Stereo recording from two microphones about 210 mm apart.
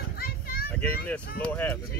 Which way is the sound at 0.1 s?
45° left (ahead or behind).